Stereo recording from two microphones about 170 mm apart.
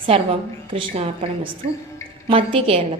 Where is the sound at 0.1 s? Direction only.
35° right (ahead or behind).